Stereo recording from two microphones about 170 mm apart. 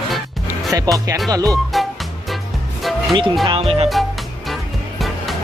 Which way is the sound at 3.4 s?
35° right (ahead or behind).